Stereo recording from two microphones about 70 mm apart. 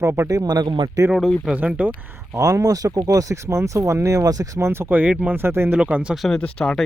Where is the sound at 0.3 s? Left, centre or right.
Right.